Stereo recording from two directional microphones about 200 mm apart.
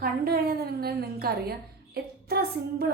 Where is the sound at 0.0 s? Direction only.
50° right (ahead or behind).